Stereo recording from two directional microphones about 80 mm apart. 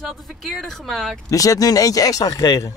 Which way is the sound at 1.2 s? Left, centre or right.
Left.